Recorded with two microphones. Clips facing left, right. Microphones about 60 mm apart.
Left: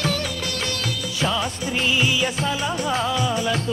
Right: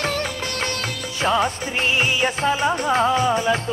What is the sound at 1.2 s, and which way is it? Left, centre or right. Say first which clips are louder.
Music: right 5 dB; right.